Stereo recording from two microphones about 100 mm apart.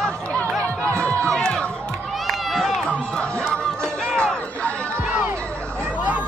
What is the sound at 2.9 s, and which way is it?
Music, 10° left (ahead or behind).